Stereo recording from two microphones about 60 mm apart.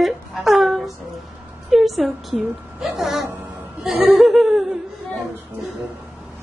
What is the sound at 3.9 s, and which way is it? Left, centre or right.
Speech, right.